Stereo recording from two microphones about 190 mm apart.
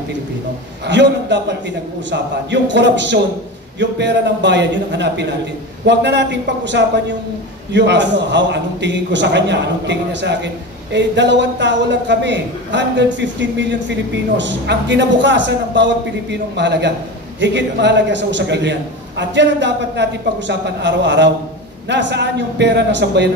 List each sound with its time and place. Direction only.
0.8 s a man's voice: 65° right (ahead or behind)